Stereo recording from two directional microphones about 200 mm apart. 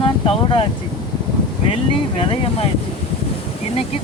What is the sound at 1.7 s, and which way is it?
Speech, 25° left (ahead or behind).